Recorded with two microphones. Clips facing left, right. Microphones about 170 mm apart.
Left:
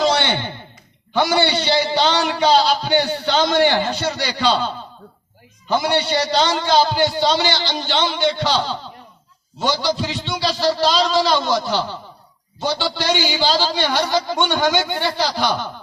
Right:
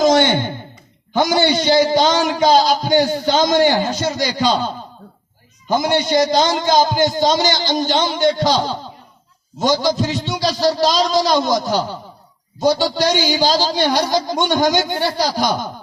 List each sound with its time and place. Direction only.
0.0 s a sound: 45° right (ahead or behind)
1.1 s a man's voice: 40° right (ahead or behind)
4.4 s a man's voice: 15° right (ahead or behind)
5.7 s a man's voice: 40° right (ahead or behind)
8.5 s a man's voice: 15° right (ahead or behind)
9.6 s a man's voice: 40° right (ahead or behind)